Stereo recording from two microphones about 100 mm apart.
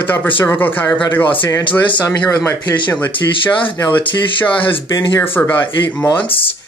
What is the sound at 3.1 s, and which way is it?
Speech, 60° left (ahead or behind).